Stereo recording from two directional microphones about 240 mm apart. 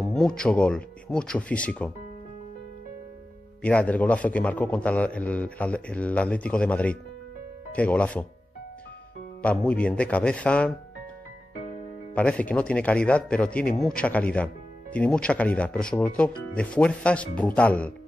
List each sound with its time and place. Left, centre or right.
0.1 s a man's voice: centre
3.6 s a man's voice: centre
9.7 s a man's voice: centre
12.1 s a man's voice: centre